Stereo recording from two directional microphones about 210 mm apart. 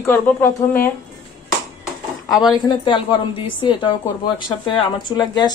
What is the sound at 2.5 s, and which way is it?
A woman's voice, 20° left (ahead or behind).